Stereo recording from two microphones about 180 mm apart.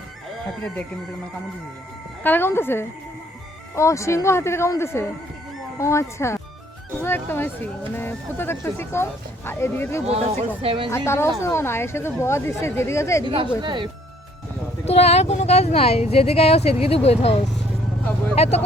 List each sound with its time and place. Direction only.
2.2 s speech: 10° left (ahead or behind)
10.1 s speech: 35° right (ahead or behind)
10.9 s speech: 15° left (ahead or behind)
13.2 s speech: 30° right (ahead or behind)
14.8 s speech: 35° left (ahead or behind)